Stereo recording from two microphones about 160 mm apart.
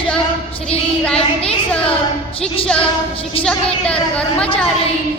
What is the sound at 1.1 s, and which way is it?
Speech, 35° left (ahead or behind).